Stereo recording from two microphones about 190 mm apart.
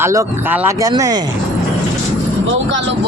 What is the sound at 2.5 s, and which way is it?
Vehicle, 75° right (ahead or behind).